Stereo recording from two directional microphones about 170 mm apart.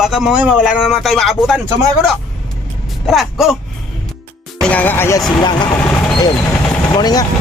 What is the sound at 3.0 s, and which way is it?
Speech, centre (ahead or behind).